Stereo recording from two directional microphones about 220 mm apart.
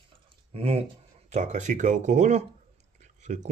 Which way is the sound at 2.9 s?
35° right (ahead or behind).